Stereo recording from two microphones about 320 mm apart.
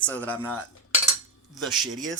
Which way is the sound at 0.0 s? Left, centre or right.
Centre.